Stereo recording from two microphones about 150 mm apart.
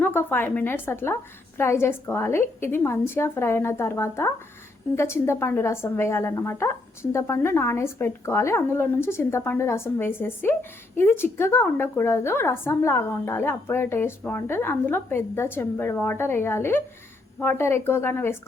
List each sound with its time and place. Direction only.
0.0 s a woman's voice: 15° left (ahead or behind)